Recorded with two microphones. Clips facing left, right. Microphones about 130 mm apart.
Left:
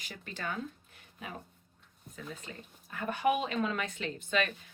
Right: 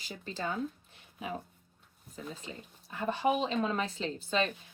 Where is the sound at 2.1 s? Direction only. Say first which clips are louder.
Right 2 dB; 30° right (ahead or behind).